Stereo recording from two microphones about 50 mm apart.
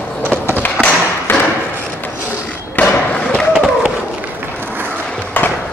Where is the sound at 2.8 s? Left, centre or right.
Left.